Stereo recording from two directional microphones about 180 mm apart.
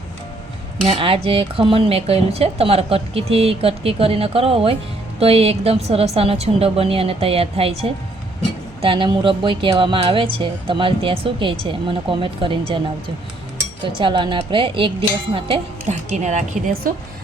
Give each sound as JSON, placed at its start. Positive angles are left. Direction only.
{"t": 0.9, "sound": "speech", "side_deg": -30}
{"t": 13.8, "sound": "speech", "side_deg": -25}